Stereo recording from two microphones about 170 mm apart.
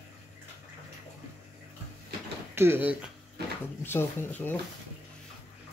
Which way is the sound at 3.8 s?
10° left (ahead or behind).